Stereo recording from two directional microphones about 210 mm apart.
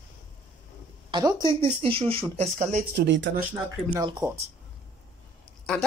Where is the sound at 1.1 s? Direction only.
20° right (ahead or behind).